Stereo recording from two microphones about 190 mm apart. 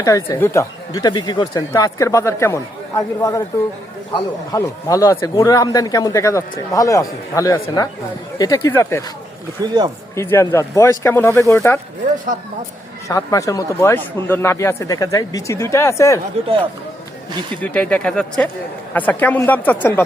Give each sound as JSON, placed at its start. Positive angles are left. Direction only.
{"t": 0.0, "sound": "speech", "side_deg": 15}
{"t": 4.5, "sound": "speech", "side_deg": 15}
{"t": 9.6, "sound": "speech", "side_deg": -20}
{"t": 10.2, "sound": "speech", "side_deg": 15}
{"t": 13.1, "sound": "speech", "side_deg": 15}
{"t": 17.6, "sound": "speech", "side_deg": 5}